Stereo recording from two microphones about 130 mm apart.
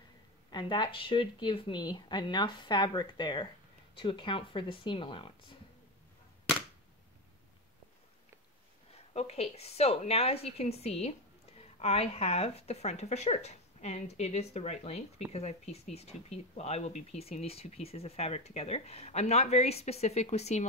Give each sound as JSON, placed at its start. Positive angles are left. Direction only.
{"t": 0.5, "sound": "speech", "side_deg": 35}
{"t": 8.9, "sound": "a woman's voice", "side_deg": 50}